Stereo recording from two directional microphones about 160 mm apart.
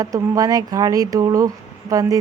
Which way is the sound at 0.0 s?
20° right (ahead or behind).